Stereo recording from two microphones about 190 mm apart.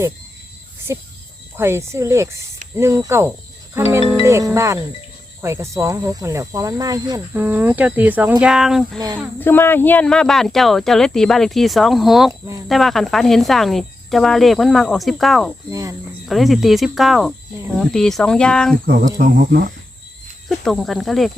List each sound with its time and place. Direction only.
0.9 s speech: 15° right (ahead or behind)
9.4 s speech: 10° left (ahead or behind)
12.3 s speech: 20° right (ahead or behind)
12.6 s speech: centre (ahead or behind)
15.7 s speech: 15° right (ahead or behind)
16.2 s speech: centre (ahead or behind)
18.9 s speech: 50° right (ahead or behind)
20.7 s speech: centre (ahead or behind)